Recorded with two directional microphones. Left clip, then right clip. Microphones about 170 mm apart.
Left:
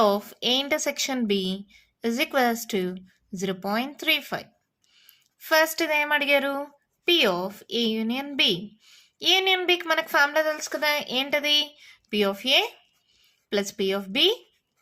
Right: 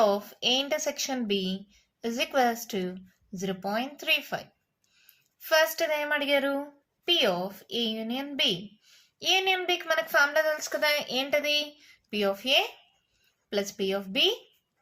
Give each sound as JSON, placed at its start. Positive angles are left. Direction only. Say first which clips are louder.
{"t": 0.0, "sound": "speech", "louder": "left 2 dB", "side_deg": 50}